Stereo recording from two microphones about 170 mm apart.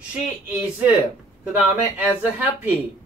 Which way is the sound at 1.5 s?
10° right (ahead or behind).